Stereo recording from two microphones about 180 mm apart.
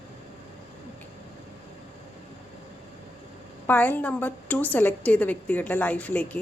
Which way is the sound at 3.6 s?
10° left (ahead or behind).